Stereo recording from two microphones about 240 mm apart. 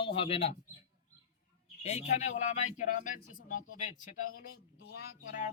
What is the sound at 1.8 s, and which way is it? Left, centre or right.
A man's voice, left.